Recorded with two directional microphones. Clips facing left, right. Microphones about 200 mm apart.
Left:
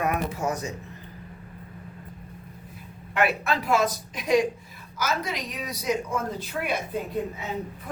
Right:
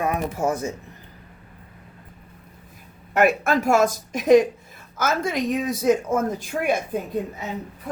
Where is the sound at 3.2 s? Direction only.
45° right (ahead or behind).